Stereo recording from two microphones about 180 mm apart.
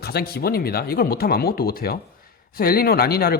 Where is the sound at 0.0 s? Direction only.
60° left (ahead or behind).